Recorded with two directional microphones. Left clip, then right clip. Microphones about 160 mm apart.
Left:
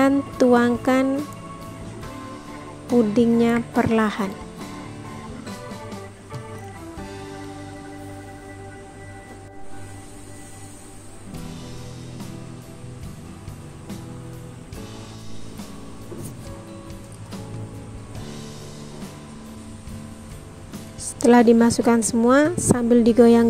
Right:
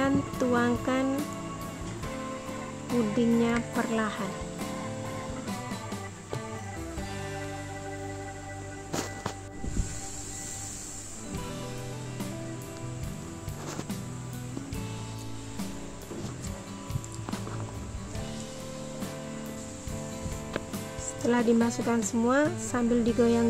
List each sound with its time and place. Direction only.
0.0 s a woman's voice: 45° left (ahead or behind)
3.2 s speech: 40° left (ahead or behind)
21.2 s a woman's voice: 45° left (ahead or behind)